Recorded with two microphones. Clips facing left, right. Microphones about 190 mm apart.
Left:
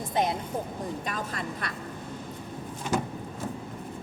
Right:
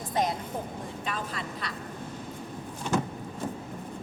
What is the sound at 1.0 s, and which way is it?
Vehicle, 45° left (ahead or behind).